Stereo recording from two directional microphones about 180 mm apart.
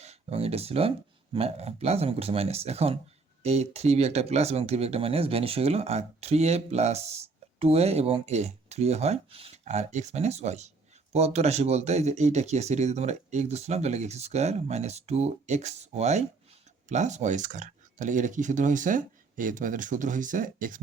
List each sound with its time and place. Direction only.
0.0 s speech: 35° right (ahead or behind)